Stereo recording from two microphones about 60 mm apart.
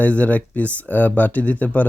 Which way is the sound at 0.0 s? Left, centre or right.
Left.